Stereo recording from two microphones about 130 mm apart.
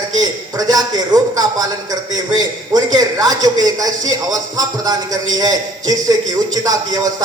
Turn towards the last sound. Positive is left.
turn(degrees=-30)  # may be behind; listen again after turning